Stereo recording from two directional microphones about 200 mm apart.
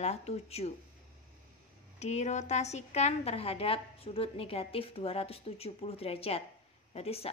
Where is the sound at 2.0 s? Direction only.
35° left (ahead or behind).